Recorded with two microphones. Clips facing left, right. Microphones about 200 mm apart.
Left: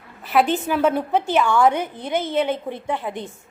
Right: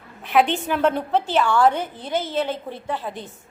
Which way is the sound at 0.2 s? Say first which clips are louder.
Even; 5° left (ahead or behind).